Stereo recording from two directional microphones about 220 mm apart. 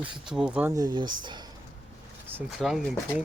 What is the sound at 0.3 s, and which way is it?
Speech, 5° right (ahead or behind).